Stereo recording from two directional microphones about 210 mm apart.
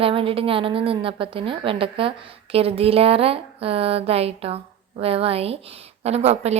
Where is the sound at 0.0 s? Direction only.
25° right (ahead or behind).